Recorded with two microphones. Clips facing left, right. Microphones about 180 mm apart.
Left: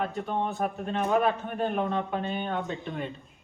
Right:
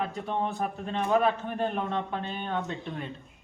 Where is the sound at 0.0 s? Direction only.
Centre (ahead or behind).